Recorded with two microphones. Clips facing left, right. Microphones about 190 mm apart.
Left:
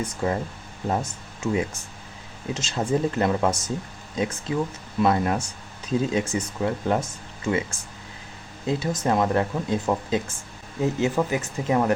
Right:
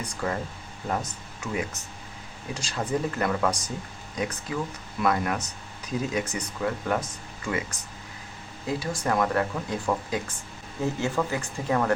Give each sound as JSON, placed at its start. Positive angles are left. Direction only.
{"t": 0.0, "sound": "speech", "side_deg": 25}